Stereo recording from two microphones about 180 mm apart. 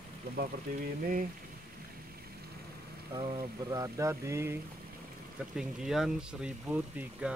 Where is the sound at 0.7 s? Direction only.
55° right (ahead or behind).